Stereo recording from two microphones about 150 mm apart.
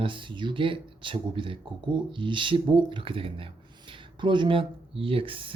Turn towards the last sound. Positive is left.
turn(degrees=-35)  # may be behind; listen again after turning